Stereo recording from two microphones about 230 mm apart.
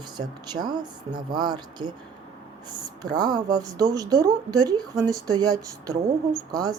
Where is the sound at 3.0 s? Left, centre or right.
Centre.